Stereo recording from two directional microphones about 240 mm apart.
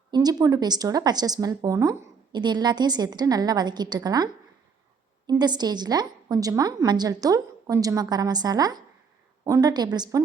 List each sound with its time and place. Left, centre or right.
0.1 s speech: centre